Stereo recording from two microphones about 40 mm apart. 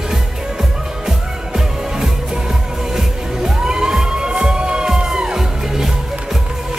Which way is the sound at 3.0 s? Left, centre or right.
Centre.